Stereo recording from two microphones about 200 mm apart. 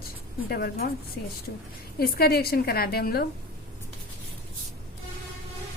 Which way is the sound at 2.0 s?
50° left (ahead or behind).